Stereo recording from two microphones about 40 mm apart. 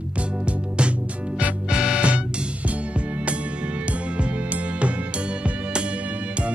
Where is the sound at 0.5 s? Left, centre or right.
Right.